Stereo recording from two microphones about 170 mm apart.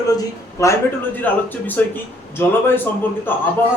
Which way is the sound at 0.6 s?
15° left (ahead or behind).